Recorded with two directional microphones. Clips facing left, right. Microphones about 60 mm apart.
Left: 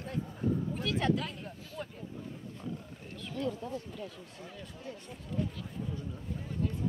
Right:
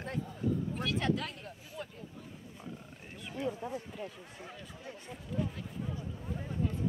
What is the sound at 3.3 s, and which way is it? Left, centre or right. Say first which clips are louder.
Speech: left 1 dB; right.